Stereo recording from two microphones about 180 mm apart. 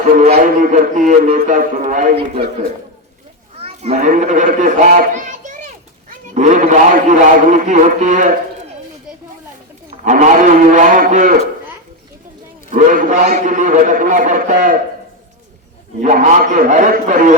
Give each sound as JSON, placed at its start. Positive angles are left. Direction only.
{"t": 0.3, "sound": "a man's voice", "side_deg": -50}
{"t": 3.6, "sound": "children playing", "side_deg": -35}
{"t": 4.1, "sound": "a child's voice", "side_deg": -45}
{"t": 10.0, "sound": "a man's voice", "side_deg": -45}
{"t": 12.7, "sound": "a man's voice", "side_deg": -45}
{"t": 16.0, "sound": "a man's voice", "side_deg": -45}